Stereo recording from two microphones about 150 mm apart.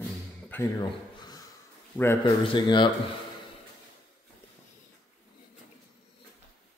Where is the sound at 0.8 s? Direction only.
30° left (ahead or behind).